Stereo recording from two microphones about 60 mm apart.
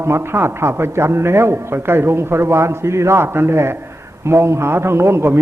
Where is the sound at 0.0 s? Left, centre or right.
Right.